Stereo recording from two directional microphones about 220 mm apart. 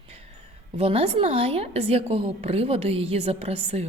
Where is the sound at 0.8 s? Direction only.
25° right (ahead or behind).